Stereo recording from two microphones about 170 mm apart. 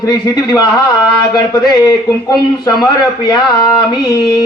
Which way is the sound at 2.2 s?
20° left (ahead or behind).